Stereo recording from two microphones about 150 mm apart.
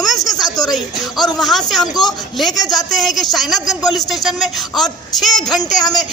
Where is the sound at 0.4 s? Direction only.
Centre (ahead or behind).